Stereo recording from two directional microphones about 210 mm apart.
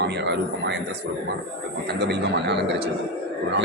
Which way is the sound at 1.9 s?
55° right (ahead or behind).